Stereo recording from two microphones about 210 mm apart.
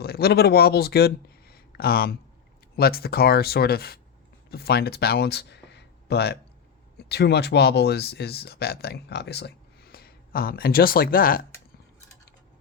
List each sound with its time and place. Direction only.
0.0 s speech: 50° left (ahead or behind)